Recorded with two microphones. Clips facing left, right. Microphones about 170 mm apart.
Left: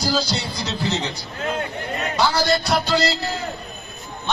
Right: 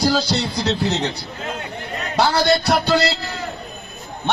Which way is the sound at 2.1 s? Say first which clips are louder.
Right 3 dB; 65° right (ahead or behind).